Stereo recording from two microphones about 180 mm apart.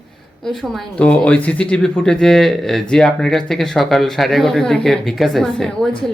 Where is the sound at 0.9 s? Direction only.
5° left (ahead or behind).